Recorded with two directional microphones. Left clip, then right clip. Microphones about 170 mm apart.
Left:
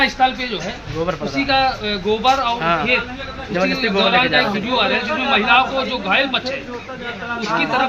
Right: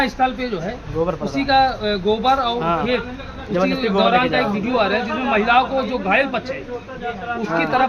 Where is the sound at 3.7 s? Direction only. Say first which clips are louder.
Left 1 dB; 65° right (ahead or behind).